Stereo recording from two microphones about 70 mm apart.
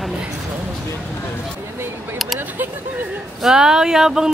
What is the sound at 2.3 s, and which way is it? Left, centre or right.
Speech, right.